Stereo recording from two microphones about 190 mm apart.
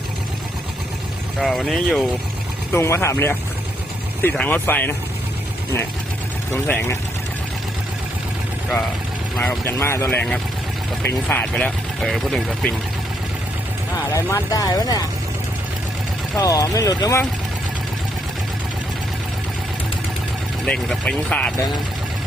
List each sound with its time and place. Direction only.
1.4 s speech: centre (ahead or behind)
2.7 s speech: 15° left (ahead or behind)
6.5 s speech: 10° left (ahead or behind)
9.3 s speech: 10° left (ahead or behind)
14.1 s speech: 15° left (ahead or behind)
16.4 s speech: 20° left (ahead or behind)
20.7 s speech: 5° left (ahead or behind)